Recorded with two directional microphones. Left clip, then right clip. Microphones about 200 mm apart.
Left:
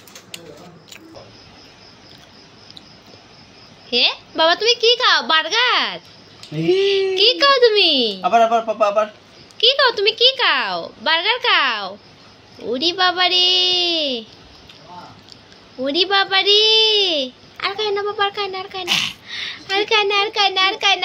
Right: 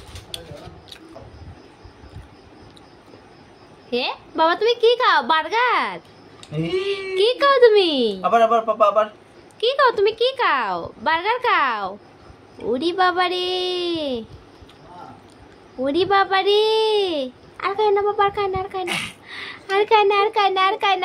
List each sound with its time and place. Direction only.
3.9 s a child's voice: 15° right (ahead or behind)
9.7 s a child's voice: 15° right (ahead or behind)
15.8 s a child's voice: 20° right (ahead or behind)